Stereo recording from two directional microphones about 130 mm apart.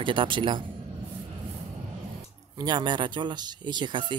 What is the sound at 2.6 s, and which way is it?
Speech, 35° right (ahead or behind).